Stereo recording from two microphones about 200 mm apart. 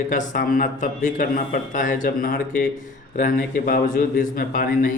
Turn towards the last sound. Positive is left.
turn(degrees=45)  # may be behind; listen again after turning